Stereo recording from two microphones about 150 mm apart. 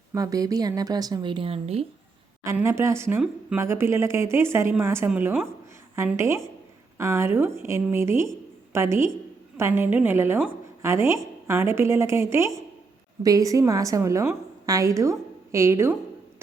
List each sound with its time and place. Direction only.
0.1 s a woman's voice: 25° right (ahead or behind); by 1.8 s 40° right (ahead or behind)
2.6 s a woman's voice: 15° right (ahead or behind)